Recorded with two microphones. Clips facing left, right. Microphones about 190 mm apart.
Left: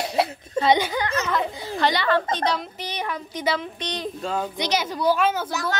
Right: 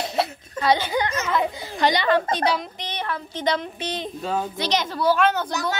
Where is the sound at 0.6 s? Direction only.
20° left (ahead or behind).